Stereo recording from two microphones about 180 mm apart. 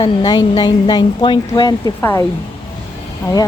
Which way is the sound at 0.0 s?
25° left (ahead or behind).